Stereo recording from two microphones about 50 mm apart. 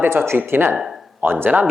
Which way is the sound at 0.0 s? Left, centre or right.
Right.